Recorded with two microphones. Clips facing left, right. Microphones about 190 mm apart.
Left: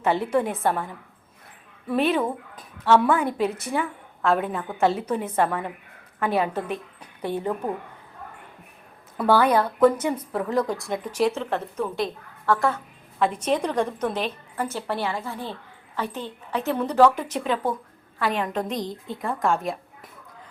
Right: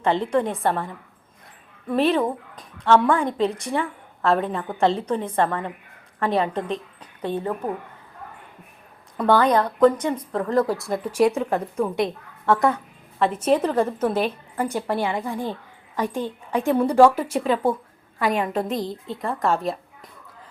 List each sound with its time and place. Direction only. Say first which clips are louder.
0.0 s a woman's voice: right 1 dB; 10° left (ahead or behind)
1.9 s a woman's voice: right 2 dB; centre (ahead or behind)
9.1 s a woman's voice: right 1 dB; 5° left (ahead or behind); by 12.8 s 20° right (ahead or behind)
13.1 s a woman's voice: right 3 dB; centre (ahead or behind)